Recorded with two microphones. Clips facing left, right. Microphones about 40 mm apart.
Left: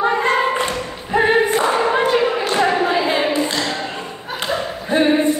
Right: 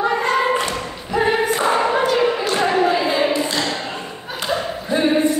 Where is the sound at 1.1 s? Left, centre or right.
Centre.